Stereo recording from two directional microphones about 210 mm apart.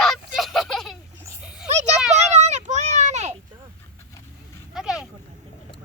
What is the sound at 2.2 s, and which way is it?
Children playing, 30° right (ahead or behind).